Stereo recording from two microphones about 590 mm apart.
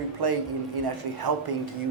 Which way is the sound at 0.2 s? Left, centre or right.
Right.